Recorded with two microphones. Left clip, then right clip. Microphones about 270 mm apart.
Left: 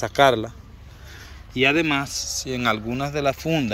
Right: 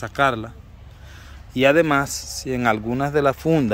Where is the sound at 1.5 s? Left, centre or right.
Centre.